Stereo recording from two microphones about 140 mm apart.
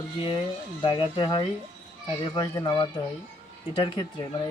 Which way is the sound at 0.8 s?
35° left (ahead or behind).